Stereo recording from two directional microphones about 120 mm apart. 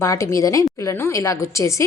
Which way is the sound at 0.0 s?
25° left (ahead or behind).